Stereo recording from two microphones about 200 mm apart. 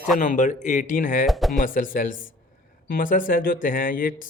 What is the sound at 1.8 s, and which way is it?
Speech, 40° left (ahead or behind).